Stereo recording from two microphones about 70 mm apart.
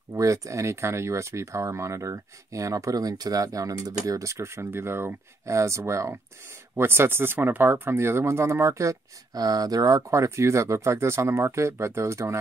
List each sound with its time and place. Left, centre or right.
0.1 s speech: right
9.4 s speech: right